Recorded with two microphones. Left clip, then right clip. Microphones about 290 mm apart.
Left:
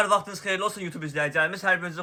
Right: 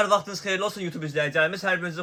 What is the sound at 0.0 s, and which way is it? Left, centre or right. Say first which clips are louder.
A man's voice: right 1 dB; centre.